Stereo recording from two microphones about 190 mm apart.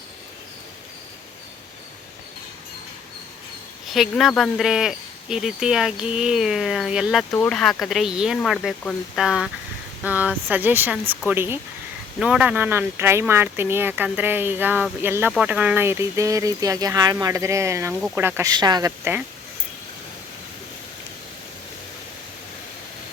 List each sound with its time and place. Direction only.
3.8 s speech: centre (ahead or behind)